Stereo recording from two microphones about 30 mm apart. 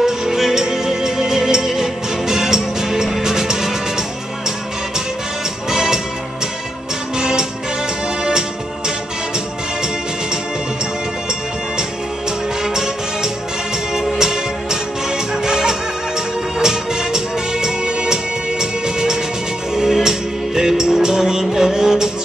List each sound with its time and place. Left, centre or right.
0.0 s music: centre
5.7 s music: centre
7.2 s music: right
12.6 s music: centre